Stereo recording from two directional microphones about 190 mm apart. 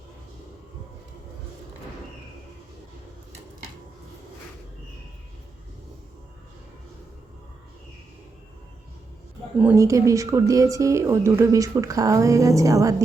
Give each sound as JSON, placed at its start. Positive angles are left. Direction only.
{"t": 9.6, "sound": "a woman's voice", "side_deg": -10}